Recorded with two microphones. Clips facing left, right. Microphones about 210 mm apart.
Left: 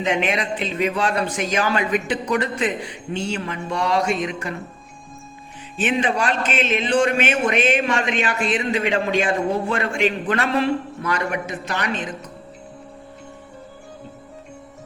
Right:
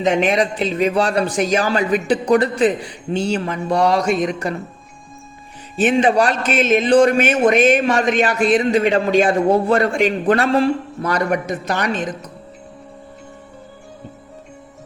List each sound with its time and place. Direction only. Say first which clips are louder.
0.0 s a man's voice: right 6 dB; 35° right (ahead or behind)
5.8 s a man's voice: right 6 dB; 40° right (ahead or behind)